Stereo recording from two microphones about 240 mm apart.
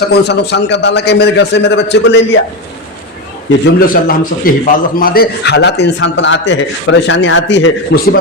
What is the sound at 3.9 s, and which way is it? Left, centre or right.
A man's voice, left.